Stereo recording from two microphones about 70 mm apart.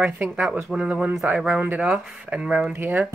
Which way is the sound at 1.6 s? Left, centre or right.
Right.